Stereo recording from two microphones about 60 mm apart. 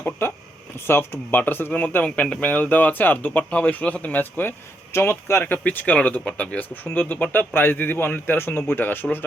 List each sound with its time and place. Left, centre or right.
0.0 s speech: left
4.9 s speech: left
6.8 s speech: left